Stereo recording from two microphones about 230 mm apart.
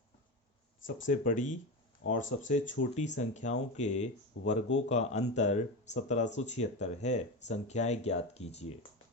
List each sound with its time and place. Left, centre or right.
1.0 s speech: left
2.0 s speech: left
2.4 s speech: left